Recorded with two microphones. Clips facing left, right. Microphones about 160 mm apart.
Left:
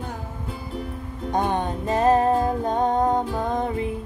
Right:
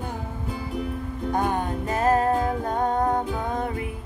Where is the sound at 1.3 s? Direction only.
20° left (ahead or behind).